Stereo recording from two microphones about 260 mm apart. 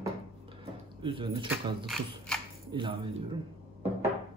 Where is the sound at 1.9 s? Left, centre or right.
Centre.